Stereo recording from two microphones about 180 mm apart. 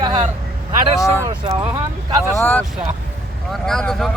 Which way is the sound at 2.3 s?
10° left (ahead or behind).